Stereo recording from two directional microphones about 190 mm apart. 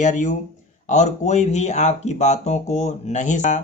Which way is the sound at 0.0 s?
40° left (ahead or behind).